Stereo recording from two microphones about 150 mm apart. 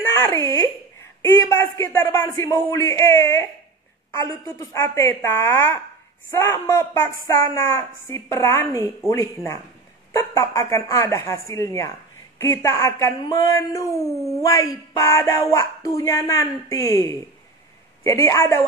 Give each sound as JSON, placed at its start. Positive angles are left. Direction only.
{"t": 0.1, "sound": "a woman's voice", "side_deg": 25}